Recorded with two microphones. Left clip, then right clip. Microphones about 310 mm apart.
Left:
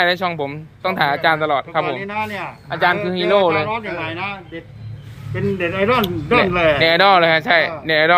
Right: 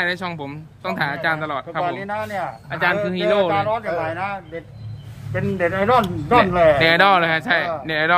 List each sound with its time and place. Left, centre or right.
0.0 s speech: centre
6.8 s speech: centre